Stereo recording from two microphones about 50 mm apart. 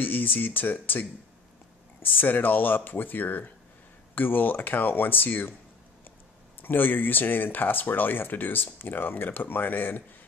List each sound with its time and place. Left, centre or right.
0.0 s speech: left
6.6 s speech: left